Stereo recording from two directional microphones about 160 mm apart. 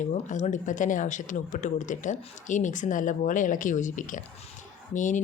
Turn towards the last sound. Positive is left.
turn(degrees=50)  # may be behind; listen again after turning